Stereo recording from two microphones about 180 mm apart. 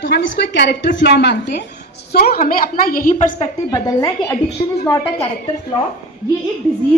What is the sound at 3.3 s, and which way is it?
A woman's voice, 25° left (ahead or behind).